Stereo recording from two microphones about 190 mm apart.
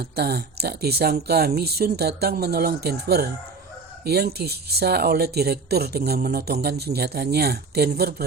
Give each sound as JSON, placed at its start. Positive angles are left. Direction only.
{"t": 0.0, "sound": "speech", "side_deg": -55}